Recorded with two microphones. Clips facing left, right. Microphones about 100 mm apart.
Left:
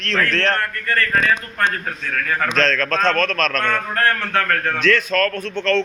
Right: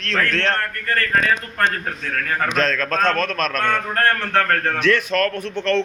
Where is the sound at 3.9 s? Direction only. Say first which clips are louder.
Right 1 dB; 35° right (ahead or behind).